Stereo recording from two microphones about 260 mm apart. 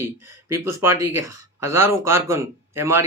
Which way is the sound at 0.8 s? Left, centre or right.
Centre.